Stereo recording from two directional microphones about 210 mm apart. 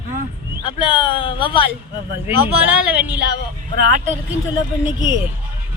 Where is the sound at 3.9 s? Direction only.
35° right (ahead or behind).